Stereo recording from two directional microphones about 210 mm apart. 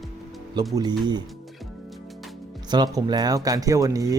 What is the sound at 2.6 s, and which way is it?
Speech, 20° right (ahead or behind).